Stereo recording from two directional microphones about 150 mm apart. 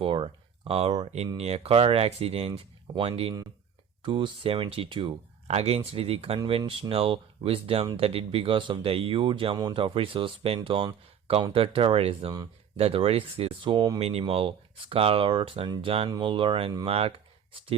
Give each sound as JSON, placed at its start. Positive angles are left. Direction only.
{"t": 0.0, "sound": "speech", "side_deg": -35}
{"t": 14.0, "sound": "speech", "side_deg": -40}